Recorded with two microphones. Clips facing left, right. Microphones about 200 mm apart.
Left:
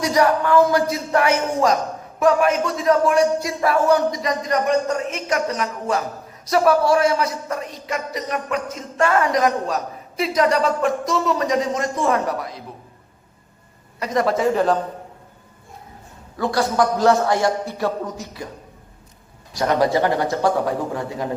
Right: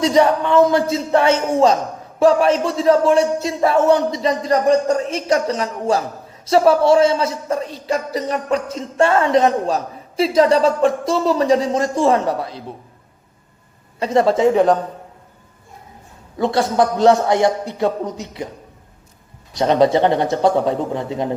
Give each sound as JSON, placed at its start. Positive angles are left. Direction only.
{"t": 0.0, "sound": "a man's voice", "side_deg": -25}
{"t": 14.0, "sound": "a man's voice", "side_deg": -30}
{"t": 16.4, "sound": "a man's voice", "side_deg": -25}
{"t": 19.5, "sound": "a man's voice", "side_deg": -20}